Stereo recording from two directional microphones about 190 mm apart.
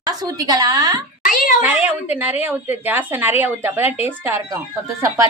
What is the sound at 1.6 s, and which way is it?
A woman's voice, 10° right (ahead or behind).